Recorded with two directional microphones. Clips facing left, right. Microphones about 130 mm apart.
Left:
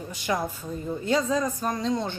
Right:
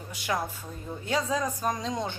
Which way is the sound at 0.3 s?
Centre (ahead or behind).